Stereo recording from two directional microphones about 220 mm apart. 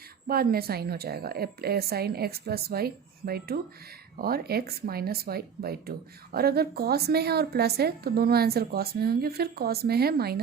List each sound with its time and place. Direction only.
0.3 s a woman's voice: 45° right (ahead or behind)